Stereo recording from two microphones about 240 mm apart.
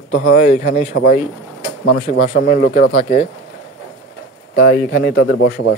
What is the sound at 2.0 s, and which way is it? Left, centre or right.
Speech, left.